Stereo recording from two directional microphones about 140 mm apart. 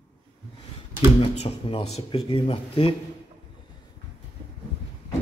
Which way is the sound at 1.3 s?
45° left (ahead or behind).